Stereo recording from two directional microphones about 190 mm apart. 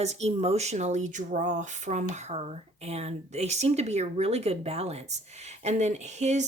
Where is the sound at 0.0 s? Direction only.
35° right (ahead or behind).